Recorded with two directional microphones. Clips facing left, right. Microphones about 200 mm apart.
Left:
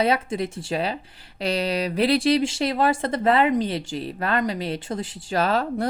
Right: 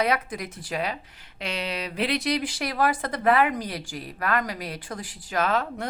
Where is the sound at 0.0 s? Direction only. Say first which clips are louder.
Left 4 dB; 25° left (ahead or behind).